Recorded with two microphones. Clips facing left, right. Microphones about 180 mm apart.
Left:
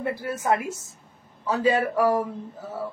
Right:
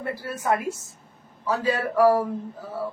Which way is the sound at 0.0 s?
20° left (ahead or behind).